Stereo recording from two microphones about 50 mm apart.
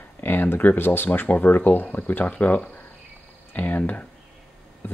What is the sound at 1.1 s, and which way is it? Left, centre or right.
Speech, left.